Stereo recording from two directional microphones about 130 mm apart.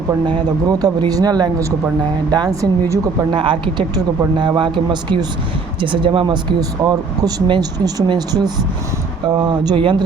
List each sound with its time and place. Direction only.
0.3 s a woman's voice: 35° right (ahead or behind)
3.3 s speech: 40° right (ahead or behind)